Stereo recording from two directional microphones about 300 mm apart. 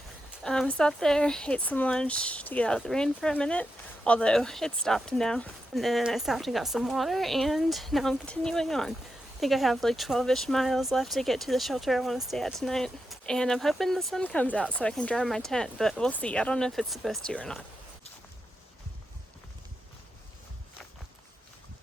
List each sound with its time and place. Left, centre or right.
0.4 s speech: centre